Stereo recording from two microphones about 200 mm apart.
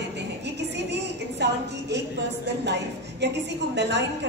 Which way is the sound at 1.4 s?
55° right (ahead or behind).